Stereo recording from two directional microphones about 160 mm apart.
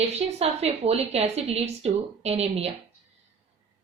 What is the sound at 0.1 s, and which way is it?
A woman's voice, 40° right (ahead or behind).